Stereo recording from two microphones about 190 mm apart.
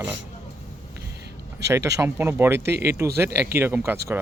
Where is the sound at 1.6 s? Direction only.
15° right (ahead or behind).